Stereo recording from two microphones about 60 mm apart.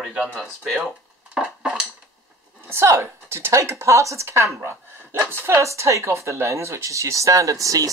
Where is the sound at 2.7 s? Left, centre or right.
Right.